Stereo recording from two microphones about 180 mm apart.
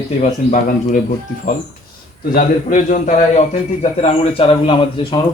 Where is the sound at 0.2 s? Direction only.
45° left (ahead or behind).